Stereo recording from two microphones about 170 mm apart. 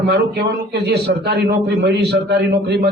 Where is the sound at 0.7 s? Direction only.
75° right (ahead or behind).